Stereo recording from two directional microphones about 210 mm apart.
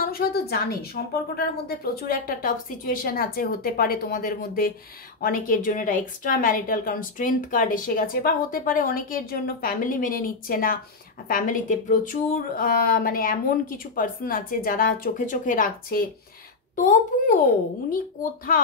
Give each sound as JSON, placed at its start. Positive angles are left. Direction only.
{"t": 0.0, "sound": "a woman's voice", "side_deg": 45}